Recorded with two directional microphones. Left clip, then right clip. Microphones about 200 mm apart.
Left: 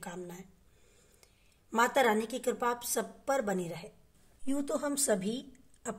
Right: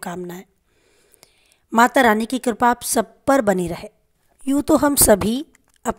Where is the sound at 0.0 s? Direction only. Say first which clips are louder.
Right 13 dB; 50° right (ahead or behind).